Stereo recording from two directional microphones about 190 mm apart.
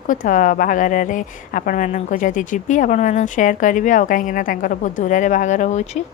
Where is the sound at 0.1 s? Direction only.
45° left (ahead or behind).